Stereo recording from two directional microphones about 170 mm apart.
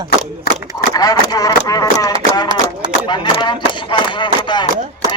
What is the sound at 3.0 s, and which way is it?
Speech, 25° left (ahead or behind).